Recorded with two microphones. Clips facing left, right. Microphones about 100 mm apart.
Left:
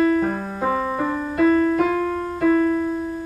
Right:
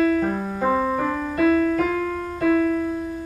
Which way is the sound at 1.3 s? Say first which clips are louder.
Left 2 dB; 25° left (ahead or behind).